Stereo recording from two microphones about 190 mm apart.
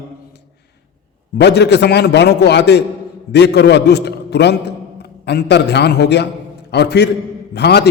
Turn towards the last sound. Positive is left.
turn(degrees=60)  # may be behind; listen again after turning